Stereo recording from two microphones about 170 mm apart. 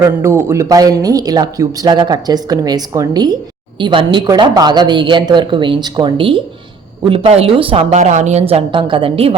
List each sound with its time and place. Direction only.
0.0 s a woman's voice: 15° right (ahead or behind); by 9.3 s 35° right (ahead or behind)